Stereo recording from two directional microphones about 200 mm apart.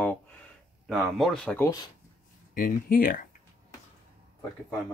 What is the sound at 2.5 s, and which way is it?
Speech, 45° left (ahead or behind).